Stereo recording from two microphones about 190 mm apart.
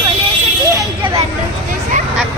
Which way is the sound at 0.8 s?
25° right (ahead or behind).